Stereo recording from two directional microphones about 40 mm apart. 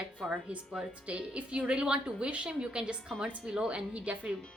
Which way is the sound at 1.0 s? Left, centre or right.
Right.